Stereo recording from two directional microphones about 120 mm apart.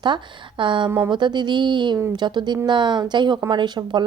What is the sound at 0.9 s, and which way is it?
Speech, 20° right (ahead or behind).